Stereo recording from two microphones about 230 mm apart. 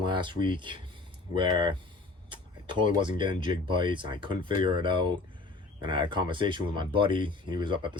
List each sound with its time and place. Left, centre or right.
0.0 s speech: centre
2.3 s a sound: right
2.9 s speech: right